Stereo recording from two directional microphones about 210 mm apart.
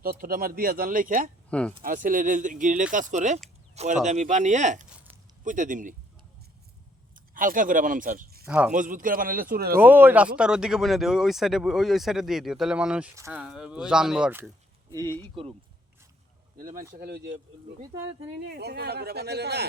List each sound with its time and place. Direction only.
0.0 s speech: 45° right (ahead or behind)
1.5 s speech: 5° left (ahead or behind)
1.8 s speech: 40° right (ahead or behind)
7.3 s speech: 40° right (ahead or behind)
8.4 s speech: 5° right (ahead or behind)
8.7 s speech: 40° right (ahead or behind)
9.7 s speech: 10° right (ahead or behind)
14.9 s speech: 20° right (ahead or behind)
16.6 s speech: 40° right (ahead or behind)
18.4 s speech: 50° right (ahead or behind)